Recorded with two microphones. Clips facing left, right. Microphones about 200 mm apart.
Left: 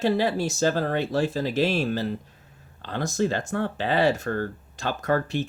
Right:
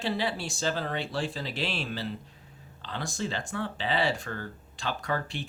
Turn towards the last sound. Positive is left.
turn(degrees=45)  # may be behind; listen again after turning